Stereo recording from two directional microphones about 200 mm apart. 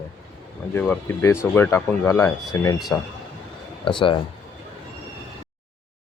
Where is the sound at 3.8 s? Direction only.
25° left (ahead or behind).